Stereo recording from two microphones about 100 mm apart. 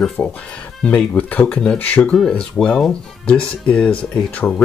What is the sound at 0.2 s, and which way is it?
Speech, 20° left (ahead or behind).